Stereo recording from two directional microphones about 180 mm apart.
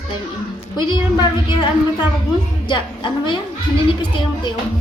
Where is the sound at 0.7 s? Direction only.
25° left (ahead or behind).